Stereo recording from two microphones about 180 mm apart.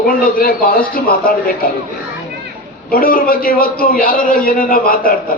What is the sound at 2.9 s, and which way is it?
A man's voice, 55° left (ahead or behind).